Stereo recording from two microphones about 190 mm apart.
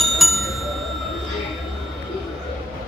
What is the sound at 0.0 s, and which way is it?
Bicycle bell, centre (ahead or behind).